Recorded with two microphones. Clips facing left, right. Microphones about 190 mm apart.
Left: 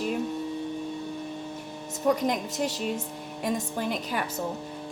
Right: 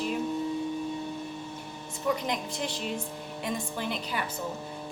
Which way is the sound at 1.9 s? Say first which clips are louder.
Left 5 dB; 45° left (ahead or behind).